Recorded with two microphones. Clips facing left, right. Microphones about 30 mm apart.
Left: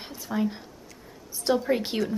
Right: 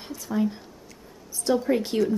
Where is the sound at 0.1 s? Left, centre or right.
Centre.